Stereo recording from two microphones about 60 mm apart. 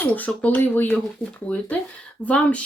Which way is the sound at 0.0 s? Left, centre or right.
Left.